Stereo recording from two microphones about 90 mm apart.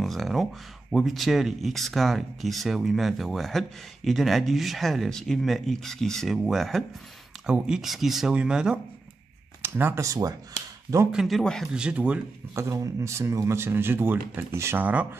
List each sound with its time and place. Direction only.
0.0 s speech: centre (ahead or behind)
9.6 s speech: 25° right (ahead or behind)
10.0 s speech: 40° right (ahead or behind)
11.1 s speech: 5° right (ahead or behind)
11.7 s speech: 10° right (ahead or behind)
12.5 s speech: 35° right (ahead or behind)